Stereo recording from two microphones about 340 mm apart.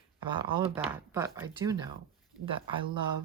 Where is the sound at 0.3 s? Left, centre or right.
Centre.